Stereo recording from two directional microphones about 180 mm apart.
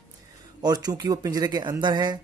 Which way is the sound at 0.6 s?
20° right (ahead or behind).